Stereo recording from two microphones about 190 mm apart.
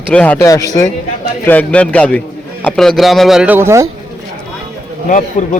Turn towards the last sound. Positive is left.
turn(degrees=40)  # may be behind; listen again after turning